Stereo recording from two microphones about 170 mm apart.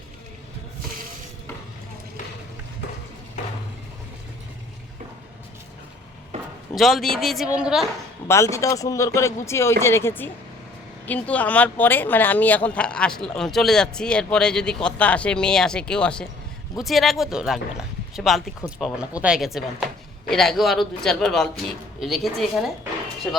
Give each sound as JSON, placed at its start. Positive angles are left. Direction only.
{"t": 6.7, "sound": "speech", "side_deg": 0}
{"t": 8.3, "sound": "speech", "side_deg": 15}